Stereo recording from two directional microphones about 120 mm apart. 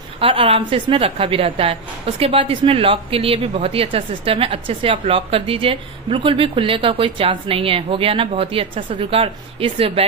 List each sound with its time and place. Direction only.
0.2 s a woman's voice: 50° right (ahead or behind)